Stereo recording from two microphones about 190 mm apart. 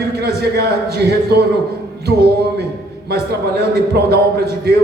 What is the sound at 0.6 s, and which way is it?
Speech, 60° right (ahead or behind).